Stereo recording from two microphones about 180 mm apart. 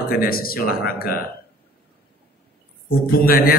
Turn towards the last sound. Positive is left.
turn(degrees=55)  # may be behind; listen again after turning